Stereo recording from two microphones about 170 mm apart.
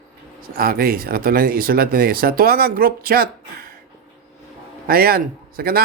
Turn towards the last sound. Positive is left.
turn(degrees=-65)  # may be behind; listen again after turning